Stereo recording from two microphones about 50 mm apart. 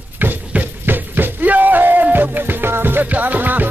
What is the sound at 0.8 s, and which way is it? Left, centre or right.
Music, right.